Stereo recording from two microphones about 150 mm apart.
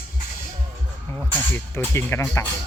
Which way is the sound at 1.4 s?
15° left (ahead or behind).